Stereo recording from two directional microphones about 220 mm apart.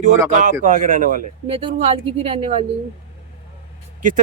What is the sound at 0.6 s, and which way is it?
Speech, 35° right (ahead or behind).